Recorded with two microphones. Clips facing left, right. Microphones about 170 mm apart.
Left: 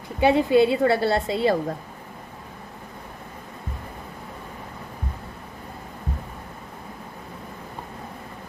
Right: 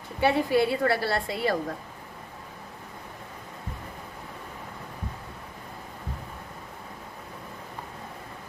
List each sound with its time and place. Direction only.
0.2 s a woman's voice: 20° left (ahead or behind)